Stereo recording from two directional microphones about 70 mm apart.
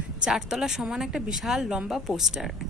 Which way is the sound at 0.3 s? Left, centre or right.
Centre.